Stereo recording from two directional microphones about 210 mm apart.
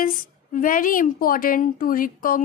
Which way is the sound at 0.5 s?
40° left (ahead or behind).